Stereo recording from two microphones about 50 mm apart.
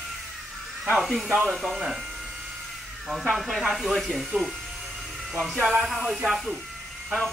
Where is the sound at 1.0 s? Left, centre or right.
Centre.